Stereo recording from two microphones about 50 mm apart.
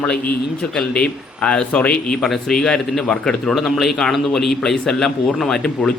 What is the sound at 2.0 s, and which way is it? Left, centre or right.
Speech, centre.